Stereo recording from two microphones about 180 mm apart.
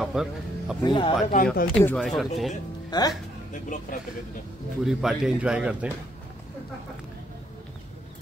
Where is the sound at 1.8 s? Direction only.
Centre (ahead or behind).